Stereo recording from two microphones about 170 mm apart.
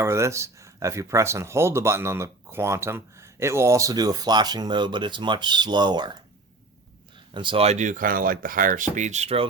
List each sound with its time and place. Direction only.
0.0 s speech: 15° right (ahead or behind)
7.3 s speech: 30° right (ahead or behind)